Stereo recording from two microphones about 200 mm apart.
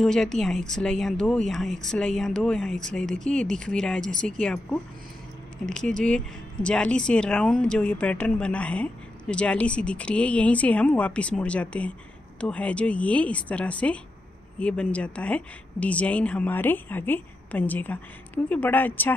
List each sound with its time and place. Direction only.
0.0 s speech: centre (ahead or behind)